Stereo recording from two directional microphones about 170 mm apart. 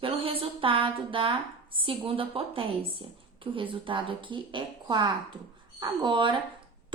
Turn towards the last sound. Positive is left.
turn(degrees=-30)  # may be behind; listen again after turning